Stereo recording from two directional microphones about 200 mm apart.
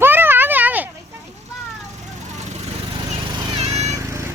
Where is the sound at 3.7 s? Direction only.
15° right (ahead or behind).